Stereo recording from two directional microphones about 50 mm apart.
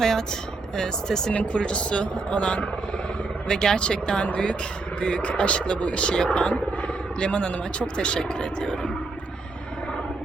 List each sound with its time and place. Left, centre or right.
0.0 s speech: centre
1.3 s speech: left